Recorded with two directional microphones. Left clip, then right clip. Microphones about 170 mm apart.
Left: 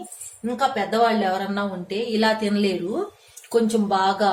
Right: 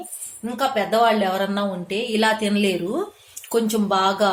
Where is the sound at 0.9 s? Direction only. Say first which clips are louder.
Right 4 dB; 40° right (ahead or behind).